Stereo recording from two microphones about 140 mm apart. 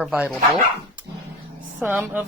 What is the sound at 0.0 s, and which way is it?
Speech, 5° right (ahead or behind).